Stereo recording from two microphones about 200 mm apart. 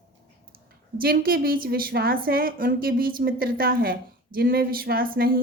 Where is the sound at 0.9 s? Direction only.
45° right (ahead or behind).